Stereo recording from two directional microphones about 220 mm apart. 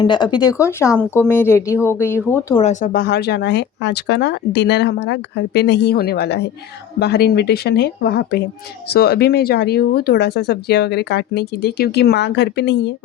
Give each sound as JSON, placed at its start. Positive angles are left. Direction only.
{"t": 0.0, "sound": "speech", "side_deg": 20}
{"t": 2.6, "sound": "speech", "side_deg": 35}